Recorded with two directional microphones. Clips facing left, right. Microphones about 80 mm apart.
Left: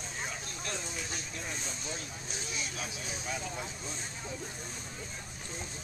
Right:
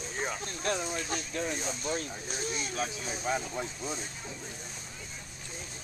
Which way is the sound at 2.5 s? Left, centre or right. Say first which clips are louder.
Right 4 dB; right.